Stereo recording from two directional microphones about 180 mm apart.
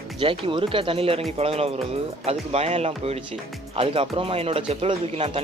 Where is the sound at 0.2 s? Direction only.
30° right (ahead or behind).